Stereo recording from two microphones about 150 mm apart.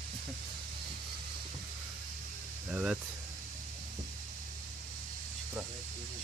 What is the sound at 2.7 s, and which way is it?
Speech, 5° right (ahead or behind).